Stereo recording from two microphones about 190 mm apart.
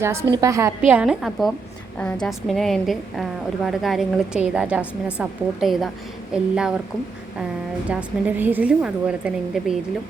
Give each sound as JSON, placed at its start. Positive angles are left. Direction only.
{"t": 0.0, "sound": "a woman's voice", "side_deg": -15}
{"t": 7.9, "sound": "a woman's voice", "side_deg": -10}